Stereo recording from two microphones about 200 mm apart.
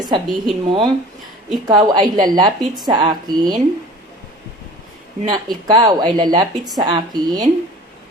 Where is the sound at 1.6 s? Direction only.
20° right (ahead or behind).